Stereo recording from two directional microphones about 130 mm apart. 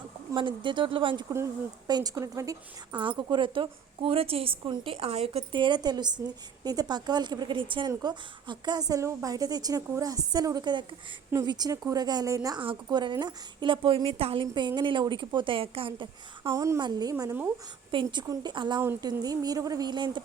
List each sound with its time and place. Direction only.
0.3 s a woman's voice: 40° right (ahead or behind)
1.9 s a woman's voice: 30° right (ahead or behind)
2.9 s a woman's voice: 40° right (ahead or behind)
5.5 s a woman's voice: 35° right (ahead or behind)
12.5 s a woman's voice: 35° right (ahead or behind)
14.4 s a woman's voice: 35° right (ahead or behind)
16.5 s a woman's voice: 25° right (ahead or behind)